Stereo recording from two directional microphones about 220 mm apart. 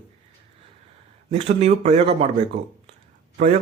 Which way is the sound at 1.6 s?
30° right (ahead or behind).